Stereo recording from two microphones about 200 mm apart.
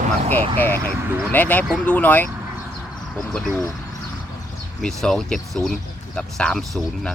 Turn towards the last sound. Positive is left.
turn(degrees=0)  # may be behind; listen again after turning